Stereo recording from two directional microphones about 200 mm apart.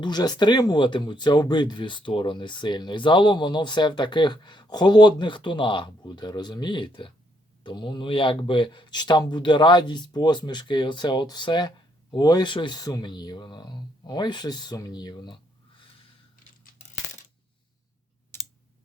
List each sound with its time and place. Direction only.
0.0 s speech: 20° left (ahead or behind)